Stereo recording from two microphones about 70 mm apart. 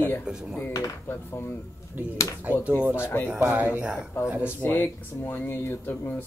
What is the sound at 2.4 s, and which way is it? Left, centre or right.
Speech, right.